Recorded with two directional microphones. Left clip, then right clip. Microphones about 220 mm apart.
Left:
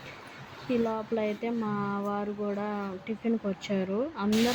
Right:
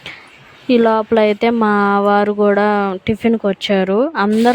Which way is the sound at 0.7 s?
50° right (ahead or behind).